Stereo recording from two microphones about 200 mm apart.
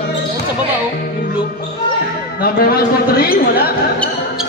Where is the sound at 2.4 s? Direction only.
50° left (ahead or behind).